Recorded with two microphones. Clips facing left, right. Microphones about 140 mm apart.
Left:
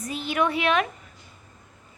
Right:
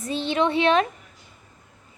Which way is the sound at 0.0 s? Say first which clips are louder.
Right 3 dB; 30° right (ahead or behind).